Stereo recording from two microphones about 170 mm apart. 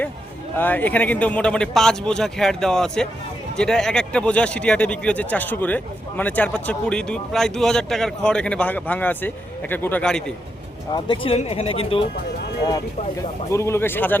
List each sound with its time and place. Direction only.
0.5 s a man's voice: 10° left (ahead or behind)
10.9 s speech: 30° left (ahead or behind)
13.5 s speech: 15° left (ahead or behind)